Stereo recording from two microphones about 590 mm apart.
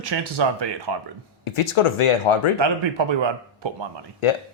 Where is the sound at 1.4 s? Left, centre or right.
Left.